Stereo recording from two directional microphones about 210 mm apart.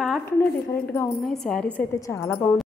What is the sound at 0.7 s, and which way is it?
A woman's voice, 10° left (ahead or behind).